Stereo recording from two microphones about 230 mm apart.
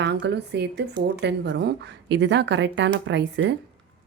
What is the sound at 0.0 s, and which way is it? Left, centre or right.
A woman's voice, right.